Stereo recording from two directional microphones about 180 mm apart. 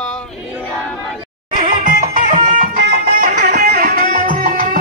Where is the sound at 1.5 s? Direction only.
50° right (ahead or behind).